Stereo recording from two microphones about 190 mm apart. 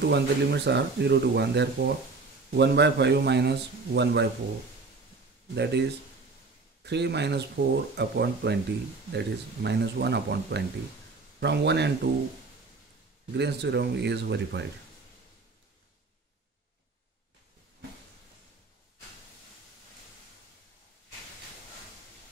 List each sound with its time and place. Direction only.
0.0 s a man's voice: 65° right (ahead or behind)
5.5 s a man's voice: 65° right (ahead or behind)
13.3 s a man's voice: 65° right (ahead or behind)